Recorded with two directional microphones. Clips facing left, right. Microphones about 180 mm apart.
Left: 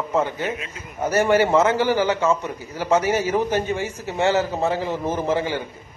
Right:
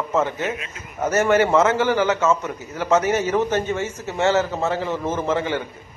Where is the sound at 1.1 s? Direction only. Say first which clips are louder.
Even; 30° left (ahead or behind).